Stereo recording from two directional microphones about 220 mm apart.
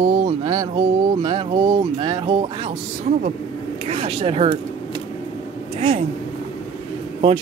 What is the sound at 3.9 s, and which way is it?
Speech, 25° right (ahead or behind).